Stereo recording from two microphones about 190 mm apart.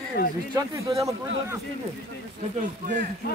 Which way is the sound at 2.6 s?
40° right (ahead or behind).